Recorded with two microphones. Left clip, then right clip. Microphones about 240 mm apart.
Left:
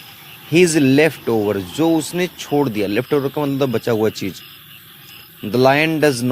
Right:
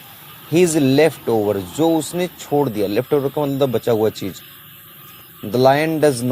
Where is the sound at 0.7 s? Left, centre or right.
Left.